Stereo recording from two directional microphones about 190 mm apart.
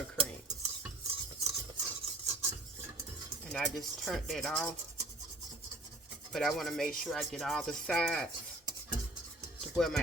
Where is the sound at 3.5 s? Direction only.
Centre (ahead or behind).